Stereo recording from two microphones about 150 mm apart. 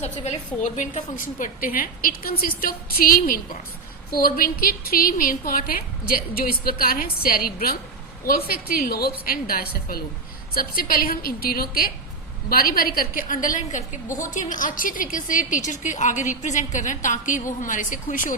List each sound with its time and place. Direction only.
0.0 s a woman's voice: 50° left (ahead or behind)